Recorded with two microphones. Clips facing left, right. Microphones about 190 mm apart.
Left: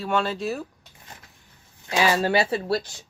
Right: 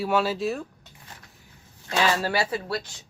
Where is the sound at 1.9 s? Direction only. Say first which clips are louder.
Left 3 dB; 10° left (ahead or behind); by 2.8 s 30° left (ahead or behind).